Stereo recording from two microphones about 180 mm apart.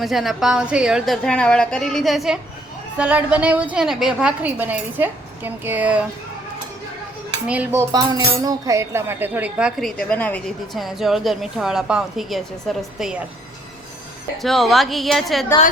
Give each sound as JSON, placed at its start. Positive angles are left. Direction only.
{"t": 0.0, "sound": "a woman's voice", "side_deg": 0}
{"t": 7.4, "sound": "speech", "side_deg": -10}
{"t": 14.4, "sound": "speech", "side_deg": 0}